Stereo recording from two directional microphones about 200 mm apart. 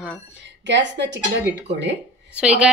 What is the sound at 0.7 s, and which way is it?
Speech, 60° right (ahead or behind).